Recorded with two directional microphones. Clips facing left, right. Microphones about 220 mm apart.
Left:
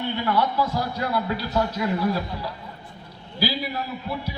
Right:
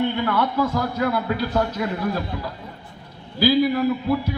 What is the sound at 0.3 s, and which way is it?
Speech, 50° right (ahead or behind).